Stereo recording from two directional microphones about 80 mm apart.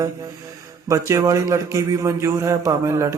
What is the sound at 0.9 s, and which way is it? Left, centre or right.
A man's voice, right.